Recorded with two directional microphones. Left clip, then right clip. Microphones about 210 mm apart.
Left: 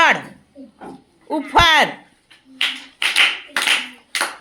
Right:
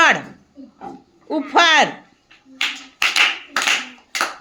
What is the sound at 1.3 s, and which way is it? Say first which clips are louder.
Speech: even; 10° right (ahead or behind).